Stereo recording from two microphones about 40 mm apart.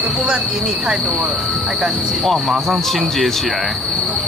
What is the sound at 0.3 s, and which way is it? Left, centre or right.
Speech, right.